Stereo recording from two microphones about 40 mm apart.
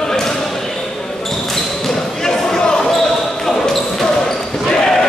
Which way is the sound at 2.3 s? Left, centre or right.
Centre.